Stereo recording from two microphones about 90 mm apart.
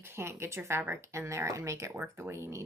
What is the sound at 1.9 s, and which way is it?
Speech, 20° right (ahead or behind).